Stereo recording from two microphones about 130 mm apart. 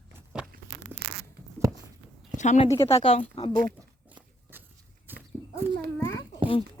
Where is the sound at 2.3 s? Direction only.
65° left (ahead or behind).